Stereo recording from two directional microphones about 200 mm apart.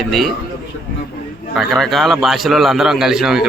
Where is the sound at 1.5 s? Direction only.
Centre (ahead or behind).